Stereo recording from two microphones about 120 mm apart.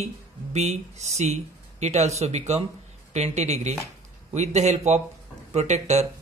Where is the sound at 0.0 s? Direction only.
70° right (ahead or behind).